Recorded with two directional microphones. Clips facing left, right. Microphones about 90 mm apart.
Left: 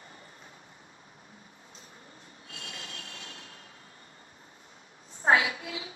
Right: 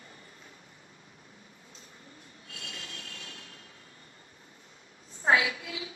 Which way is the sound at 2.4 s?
30° left (ahead or behind).